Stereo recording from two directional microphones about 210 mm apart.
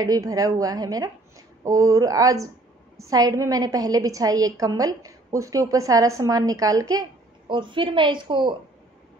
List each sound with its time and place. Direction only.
0.0 s a woman's voice: 15° right (ahead or behind)